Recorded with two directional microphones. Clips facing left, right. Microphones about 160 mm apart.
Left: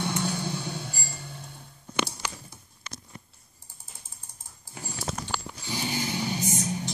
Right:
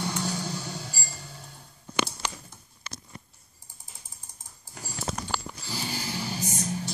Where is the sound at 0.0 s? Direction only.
5° right (ahead or behind).